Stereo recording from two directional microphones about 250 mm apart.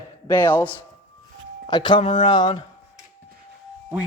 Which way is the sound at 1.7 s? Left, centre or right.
Centre.